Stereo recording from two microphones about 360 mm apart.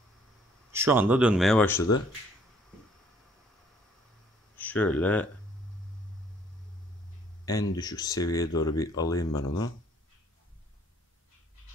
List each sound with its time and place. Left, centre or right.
0.7 s speech: centre
4.6 s speech: centre
7.7 s speech: centre